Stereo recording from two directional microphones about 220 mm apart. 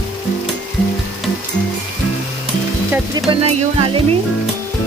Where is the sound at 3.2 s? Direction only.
25° right (ahead or behind).